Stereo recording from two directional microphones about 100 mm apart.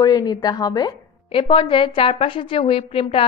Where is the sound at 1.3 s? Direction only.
60° left (ahead or behind).